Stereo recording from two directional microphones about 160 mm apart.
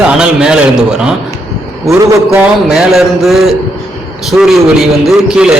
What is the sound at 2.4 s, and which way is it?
A man's voice, 5° right (ahead or behind).